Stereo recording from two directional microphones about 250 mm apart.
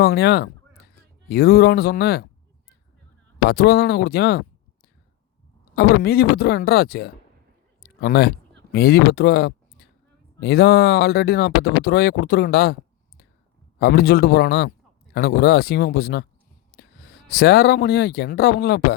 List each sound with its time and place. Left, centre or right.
0.0 s speech: left
3.4 s speech: left
5.7 s speech: left
7.8 s a sound: left
8.7 s speech: left
13.7 s speech: left